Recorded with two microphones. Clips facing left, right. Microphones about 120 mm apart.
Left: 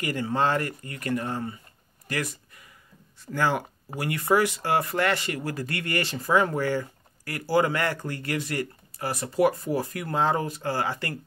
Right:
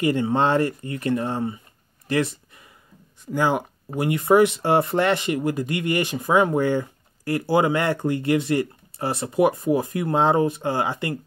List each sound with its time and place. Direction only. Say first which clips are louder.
0.0 s speech: right 5 dB; 25° right (ahead or behind)
2.0 s a sound: right 8 dB; 25° right (ahead or behind)
3.3 s speech: right 4 dB; 15° right (ahead or behind)